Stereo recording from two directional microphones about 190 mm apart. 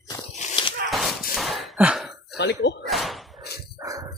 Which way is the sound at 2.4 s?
60° left (ahead or behind).